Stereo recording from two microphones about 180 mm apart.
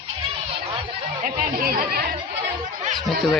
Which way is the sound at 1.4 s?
55° right (ahead or behind).